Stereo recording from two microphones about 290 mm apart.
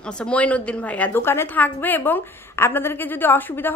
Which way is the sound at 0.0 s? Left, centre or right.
Centre.